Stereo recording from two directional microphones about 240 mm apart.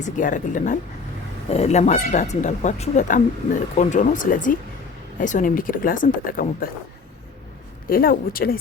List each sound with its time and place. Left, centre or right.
0.0 s speech: left
7.9 s speech: left